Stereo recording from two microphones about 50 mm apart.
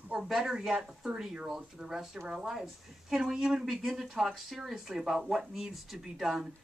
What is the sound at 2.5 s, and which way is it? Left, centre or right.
Speech, centre.